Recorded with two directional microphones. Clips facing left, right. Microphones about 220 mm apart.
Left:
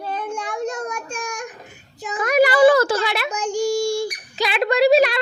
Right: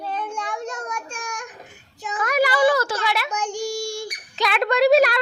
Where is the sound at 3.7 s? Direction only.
30° left (ahead or behind).